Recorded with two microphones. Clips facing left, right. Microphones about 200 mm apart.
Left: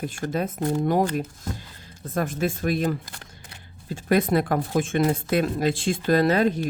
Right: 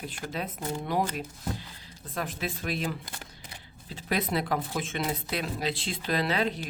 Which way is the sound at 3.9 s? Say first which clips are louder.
Left 9 dB; 50° left (ahead or behind).